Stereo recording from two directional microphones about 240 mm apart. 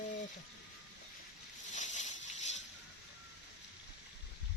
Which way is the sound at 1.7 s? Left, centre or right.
Left.